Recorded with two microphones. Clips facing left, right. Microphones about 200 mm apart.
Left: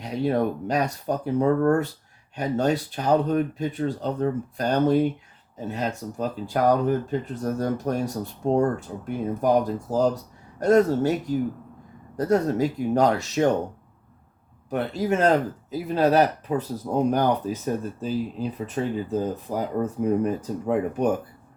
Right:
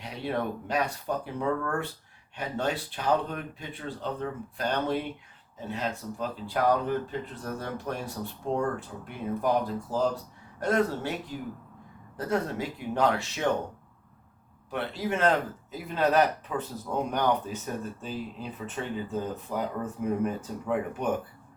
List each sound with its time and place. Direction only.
0.0 s speech: 40° left (ahead or behind)
14.7 s speech: 45° left (ahead or behind)